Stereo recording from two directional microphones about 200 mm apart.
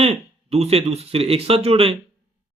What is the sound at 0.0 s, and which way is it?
Speech, 30° right (ahead or behind).